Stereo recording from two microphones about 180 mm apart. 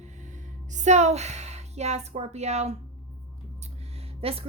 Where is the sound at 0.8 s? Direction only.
40° right (ahead or behind).